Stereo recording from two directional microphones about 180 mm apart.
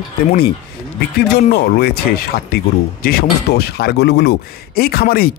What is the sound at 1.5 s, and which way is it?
Speech, 60° left (ahead or behind).